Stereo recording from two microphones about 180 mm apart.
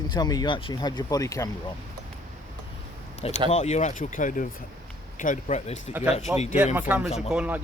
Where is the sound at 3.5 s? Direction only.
40° left (ahead or behind).